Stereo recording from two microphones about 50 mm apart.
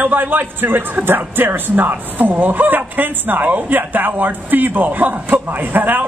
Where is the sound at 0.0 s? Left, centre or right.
Right.